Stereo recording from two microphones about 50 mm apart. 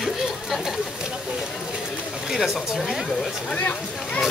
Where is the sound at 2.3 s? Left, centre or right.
Centre.